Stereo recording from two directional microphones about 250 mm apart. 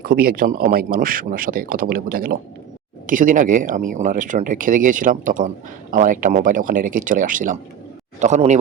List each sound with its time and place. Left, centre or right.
0.0 s a man's voice: right